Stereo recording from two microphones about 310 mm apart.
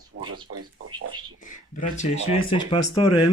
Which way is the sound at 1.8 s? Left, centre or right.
Centre.